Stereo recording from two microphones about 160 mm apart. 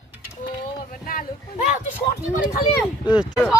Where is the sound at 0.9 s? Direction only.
60° left (ahead or behind).